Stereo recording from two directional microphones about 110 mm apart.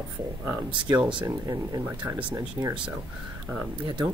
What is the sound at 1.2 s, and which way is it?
Speech, 35° right (ahead or behind).